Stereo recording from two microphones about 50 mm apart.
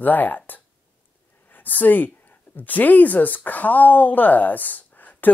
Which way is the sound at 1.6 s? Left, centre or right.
Left.